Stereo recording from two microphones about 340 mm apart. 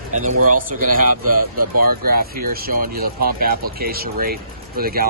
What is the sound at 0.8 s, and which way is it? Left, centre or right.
Speech, right.